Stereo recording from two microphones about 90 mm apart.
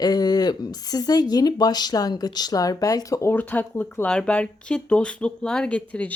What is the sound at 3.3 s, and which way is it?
Speech, 20° left (ahead or behind).